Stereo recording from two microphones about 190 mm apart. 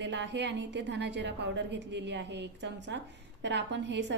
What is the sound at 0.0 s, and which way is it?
A woman's voice, 70° right (ahead or behind).